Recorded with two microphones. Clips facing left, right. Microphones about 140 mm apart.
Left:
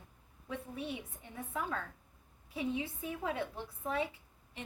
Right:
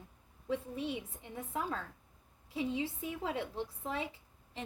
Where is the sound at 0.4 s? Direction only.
30° right (ahead or behind).